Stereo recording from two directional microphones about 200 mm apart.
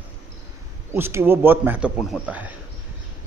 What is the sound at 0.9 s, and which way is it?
A man's voice, 10° right (ahead or behind).